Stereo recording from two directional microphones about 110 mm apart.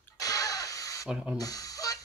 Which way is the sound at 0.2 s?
35° left (ahead or behind).